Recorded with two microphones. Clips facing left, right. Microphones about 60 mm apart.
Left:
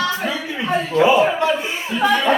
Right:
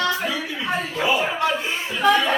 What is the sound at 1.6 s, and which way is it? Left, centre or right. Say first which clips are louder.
Speech: left 1 dB; centre.